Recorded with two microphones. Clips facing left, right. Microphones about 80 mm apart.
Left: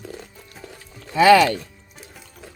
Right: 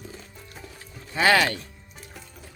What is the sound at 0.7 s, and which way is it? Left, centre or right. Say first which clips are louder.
Music: left 3 dB; left.